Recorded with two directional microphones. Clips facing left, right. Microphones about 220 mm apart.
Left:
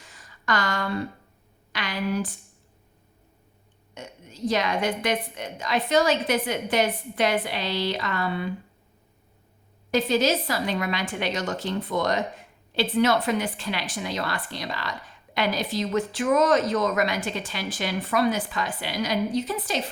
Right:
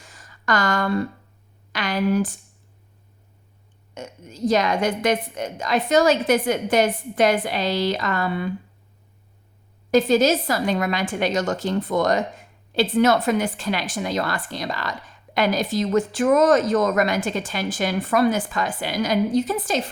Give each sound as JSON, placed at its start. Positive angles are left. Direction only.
{"t": 0.4, "sound": "a woman's voice", "side_deg": -45}
{"t": 3.9, "sound": "a woman's voice", "side_deg": -45}
{"t": 9.9, "sound": "a woman's voice", "side_deg": -45}